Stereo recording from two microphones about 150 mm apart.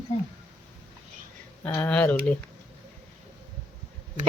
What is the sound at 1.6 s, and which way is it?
Speech, 10° left (ahead or behind).